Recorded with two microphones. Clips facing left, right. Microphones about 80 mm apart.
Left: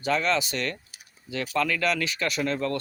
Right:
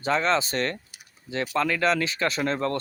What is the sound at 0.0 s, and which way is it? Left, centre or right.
Speech, right.